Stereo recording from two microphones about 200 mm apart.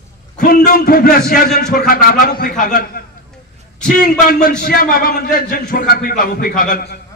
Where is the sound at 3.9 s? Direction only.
45° left (ahead or behind).